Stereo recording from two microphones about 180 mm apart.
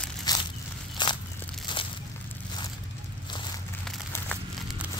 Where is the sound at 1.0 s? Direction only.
25° left (ahead or behind).